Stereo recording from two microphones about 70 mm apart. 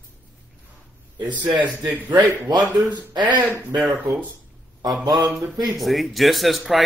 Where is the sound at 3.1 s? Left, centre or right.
Right.